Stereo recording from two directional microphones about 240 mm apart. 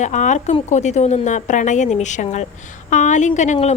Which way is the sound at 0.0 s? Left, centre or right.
Left.